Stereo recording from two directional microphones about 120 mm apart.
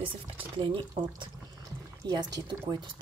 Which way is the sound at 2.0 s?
35° right (ahead or behind).